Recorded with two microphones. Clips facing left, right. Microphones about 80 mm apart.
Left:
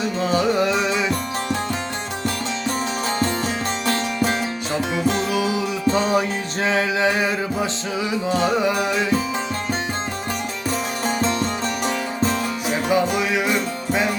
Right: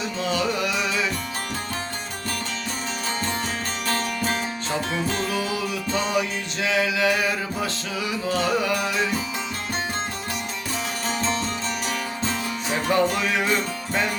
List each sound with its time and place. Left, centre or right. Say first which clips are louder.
0.2 s music: left 5 dB; left
5.1 s music: left 4 dB; centre
5.9 s music: left 5 dB; left
12.7 s music: left 1 dB; centre